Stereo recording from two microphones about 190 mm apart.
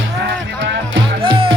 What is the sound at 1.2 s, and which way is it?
Music, 30° right (ahead or behind).